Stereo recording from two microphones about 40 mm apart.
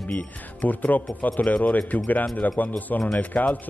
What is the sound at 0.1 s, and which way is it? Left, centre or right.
Speech, left.